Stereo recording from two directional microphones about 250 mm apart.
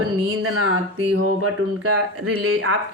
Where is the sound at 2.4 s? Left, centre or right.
Right.